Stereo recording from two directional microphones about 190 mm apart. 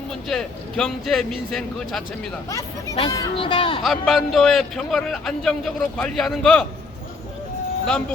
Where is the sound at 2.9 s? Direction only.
25° left (ahead or behind).